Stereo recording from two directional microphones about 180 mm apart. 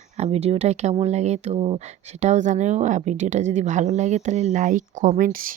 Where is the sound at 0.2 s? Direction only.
35° right (ahead or behind).